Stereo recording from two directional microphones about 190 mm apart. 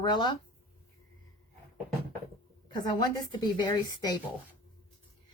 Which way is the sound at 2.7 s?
20° left (ahead or behind).